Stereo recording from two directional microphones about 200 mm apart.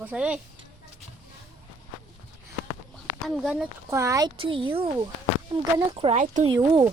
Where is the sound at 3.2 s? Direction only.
Centre (ahead or behind); by 6.5 s 35° right (ahead or behind).